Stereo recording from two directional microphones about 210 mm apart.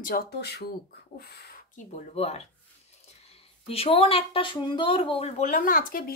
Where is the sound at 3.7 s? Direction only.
30° left (ahead or behind).